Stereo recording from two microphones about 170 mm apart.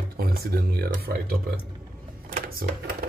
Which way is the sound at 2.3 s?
65° right (ahead or behind).